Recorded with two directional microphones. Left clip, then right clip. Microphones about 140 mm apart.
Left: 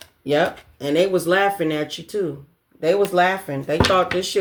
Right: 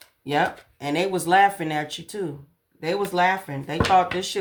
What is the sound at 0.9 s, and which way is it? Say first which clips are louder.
Speech: left 4 dB; 35° right (ahead or behind).